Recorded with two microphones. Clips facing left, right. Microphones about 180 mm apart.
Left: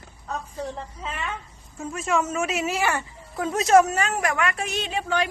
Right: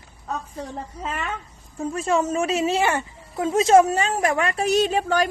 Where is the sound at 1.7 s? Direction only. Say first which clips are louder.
Right 3 dB; 30° right (ahead or behind).